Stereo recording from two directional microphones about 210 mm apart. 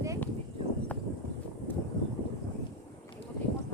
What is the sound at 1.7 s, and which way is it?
Vehicle, 10° left (ahead or behind).